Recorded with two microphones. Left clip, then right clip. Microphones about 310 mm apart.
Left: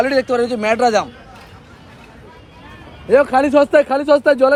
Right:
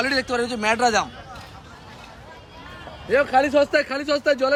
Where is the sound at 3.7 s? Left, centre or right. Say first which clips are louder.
Left 9 dB; left.